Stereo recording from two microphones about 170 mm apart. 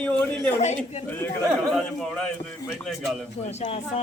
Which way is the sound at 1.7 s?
5° left (ahead or behind).